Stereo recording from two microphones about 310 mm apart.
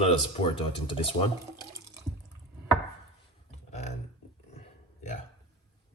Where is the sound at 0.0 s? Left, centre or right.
Centre.